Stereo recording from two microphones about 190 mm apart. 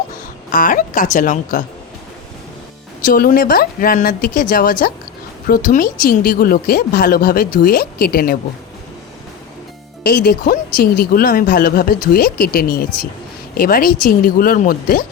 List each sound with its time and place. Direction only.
0.5 s speech: 45° left (ahead or behind)
3.0 s speech: 50° left (ahead or behind)
10.0 s speech: 55° left (ahead or behind)